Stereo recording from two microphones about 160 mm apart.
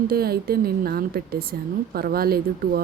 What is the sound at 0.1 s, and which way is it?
A woman's voice, 75° right (ahead or behind).